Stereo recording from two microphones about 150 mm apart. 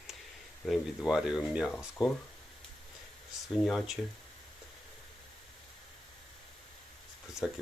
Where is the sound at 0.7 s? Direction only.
5° right (ahead or behind).